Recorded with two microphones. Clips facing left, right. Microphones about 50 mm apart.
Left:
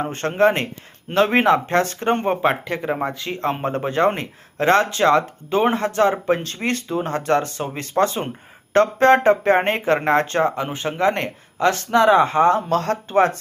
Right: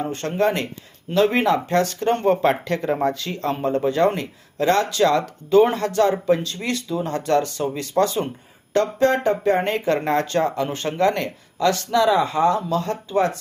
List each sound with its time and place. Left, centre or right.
0.0 s speech: left
11.1 s speech: left
12.6 s speech: left